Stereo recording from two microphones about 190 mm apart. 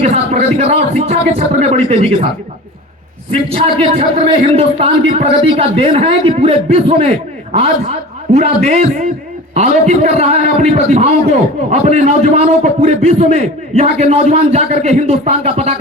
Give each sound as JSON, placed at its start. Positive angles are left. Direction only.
{"t": 0.0, "sound": "a man's voice", "side_deg": -35}
{"t": 3.5, "sound": "a man's voice", "side_deg": -30}